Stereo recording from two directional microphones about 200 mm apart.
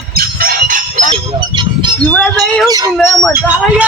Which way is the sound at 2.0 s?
5° left (ahead or behind).